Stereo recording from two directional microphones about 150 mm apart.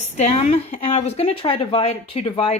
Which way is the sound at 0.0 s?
50° left (ahead or behind).